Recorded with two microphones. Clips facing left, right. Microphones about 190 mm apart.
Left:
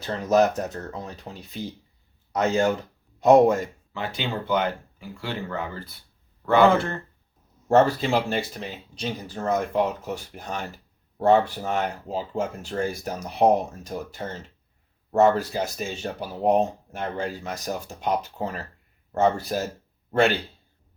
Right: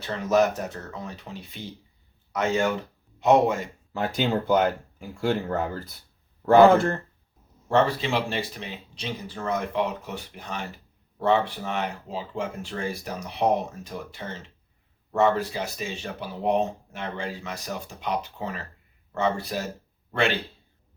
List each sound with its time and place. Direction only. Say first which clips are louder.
0.0 s speech: left 2 dB; 35° left (ahead or behind)
3.9 s speech: right 5 dB; 45° right (ahead or behind)
7.7 s speech: left 3 dB; 45° left (ahead or behind)